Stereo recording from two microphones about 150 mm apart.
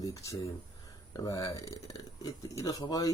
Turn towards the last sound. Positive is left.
turn(degrees=25)  # may be behind; listen again after turning